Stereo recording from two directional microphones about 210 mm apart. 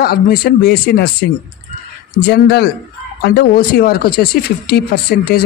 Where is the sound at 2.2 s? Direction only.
50° left (ahead or behind).